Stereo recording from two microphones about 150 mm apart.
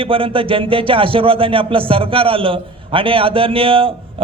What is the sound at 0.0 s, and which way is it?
Speech, 35° right (ahead or behind).